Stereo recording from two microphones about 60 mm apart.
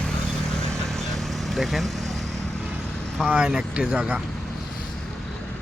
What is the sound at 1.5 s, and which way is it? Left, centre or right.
Speech, centre.